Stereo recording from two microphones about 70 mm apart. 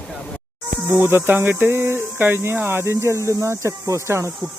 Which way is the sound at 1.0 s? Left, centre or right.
Right.